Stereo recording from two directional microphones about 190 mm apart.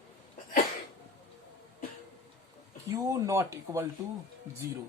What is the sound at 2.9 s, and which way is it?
Speech, 15° right (ahead or behind).